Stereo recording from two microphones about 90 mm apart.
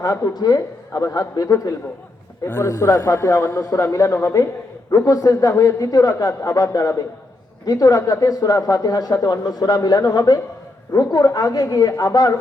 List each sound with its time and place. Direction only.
0.0 s a man's voice: 50° left (ahead or behind)